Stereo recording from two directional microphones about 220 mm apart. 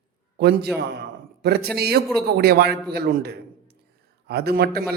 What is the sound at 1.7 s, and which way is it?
A man's voice, 45° right (ahead or behind).